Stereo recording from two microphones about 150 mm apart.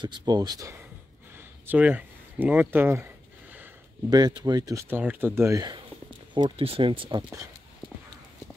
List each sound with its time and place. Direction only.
0.0 s speech: 30° right (ahead or behind)
1.7 s speech: 10° right (ahead or behind)
4.1 s speech: 25° right (ahead or behind)
4.8 s speech: 15° right (ahead or behind); by 7.2 s 30° right (ahead or behind)